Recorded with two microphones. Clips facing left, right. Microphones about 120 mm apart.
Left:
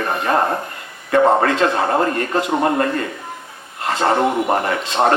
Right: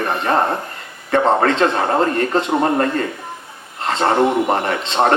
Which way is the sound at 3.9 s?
30° right (ahead or behind).